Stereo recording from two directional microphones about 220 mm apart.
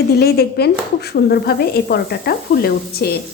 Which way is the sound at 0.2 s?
45° left (ahead or behind).